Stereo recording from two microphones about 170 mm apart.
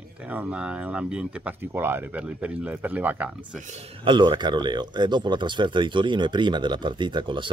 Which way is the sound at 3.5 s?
45° right (ahead or behind).